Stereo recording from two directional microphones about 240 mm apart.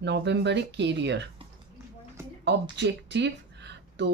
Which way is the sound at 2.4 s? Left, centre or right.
Right.